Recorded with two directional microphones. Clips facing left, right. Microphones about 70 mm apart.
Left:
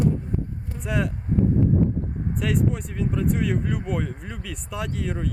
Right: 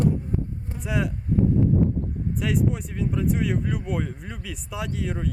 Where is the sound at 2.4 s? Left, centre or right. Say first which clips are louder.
Left 1 dB; centre.